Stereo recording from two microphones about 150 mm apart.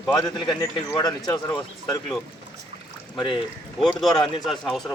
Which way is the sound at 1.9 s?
25° left (ahead or behind).